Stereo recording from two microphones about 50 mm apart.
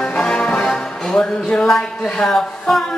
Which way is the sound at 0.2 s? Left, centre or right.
Centre.